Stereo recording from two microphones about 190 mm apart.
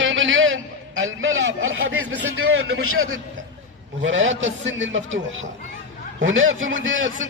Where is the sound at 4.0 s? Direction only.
75° right (ahead or behind).